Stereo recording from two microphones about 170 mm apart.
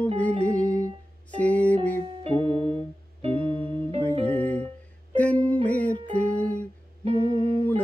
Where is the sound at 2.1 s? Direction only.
35° right (ahead or behind).